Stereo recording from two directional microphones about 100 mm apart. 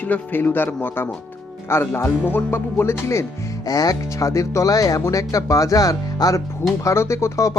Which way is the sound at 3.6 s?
40° left (ahead or behind).